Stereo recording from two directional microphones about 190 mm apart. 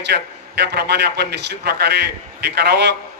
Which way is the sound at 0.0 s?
60° right (ahead or behind).